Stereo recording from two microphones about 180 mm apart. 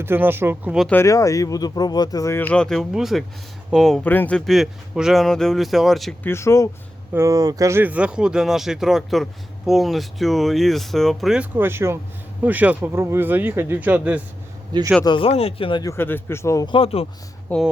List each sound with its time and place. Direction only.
0.0 s speech: 10° right (ahead or behind)
0.9 s speech: 15° left (ahead or behind)
4.0 s speech: 10° left (ahead or behind)
6.2 s speech: 15° left (ahead or behind)
7.1 s speech: 15° right (ahead or behind)
14.7 s a man's voice: 20° right (ahead or behind)
15.0 s speech: 30° left (ahead or behind)
16.7 s speech: 30° left (ahead or behind)
17.5 s speech: 10° left (ahead or behind)